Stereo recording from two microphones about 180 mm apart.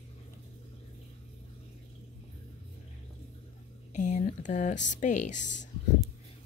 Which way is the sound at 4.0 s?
45° left (ahead or behind).